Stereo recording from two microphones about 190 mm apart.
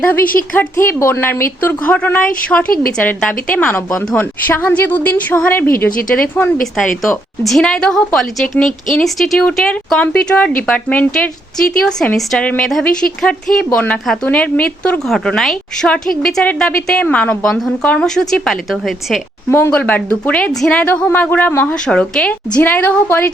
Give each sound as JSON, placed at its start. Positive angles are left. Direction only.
{"t": 0.0, "sound": "a woman's voice", "side_deg": 10}
{"t": 5.6, "sound": "a woman's voice", "side_deg": 50}
{"t": 6.7, "sound": "a woman's voice", "side_deg": 0}
{"t": 19.5, "sound": "a woman's voice", "side_deg": 10}